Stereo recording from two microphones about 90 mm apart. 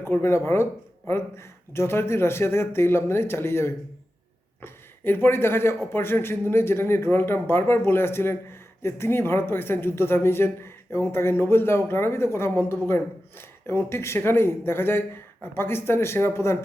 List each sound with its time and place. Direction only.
0.0 s speech: 30° left (ahead or behind)